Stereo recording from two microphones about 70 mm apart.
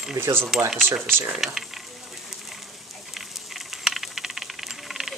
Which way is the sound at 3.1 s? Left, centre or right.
Centre.